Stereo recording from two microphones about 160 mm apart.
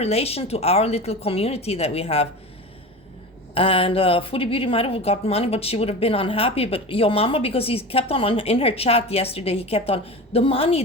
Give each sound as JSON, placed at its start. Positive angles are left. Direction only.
{"t": 0.0, "sound": "a woman's voice", "side_deg": 40}
{"t": 3.5, "sound": "a woman's voice", "side_deg": 35}